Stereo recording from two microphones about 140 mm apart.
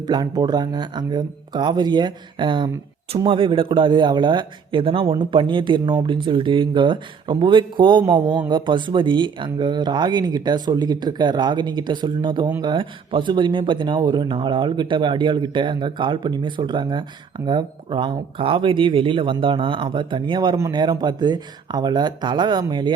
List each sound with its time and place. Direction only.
0.0 s a man's voice: 30° right (ahead or behind)